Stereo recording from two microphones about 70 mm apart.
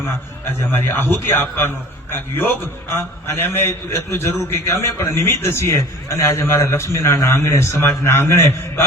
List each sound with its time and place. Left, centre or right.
0.7 s a man's voice: left
3.5 s a man's voice: left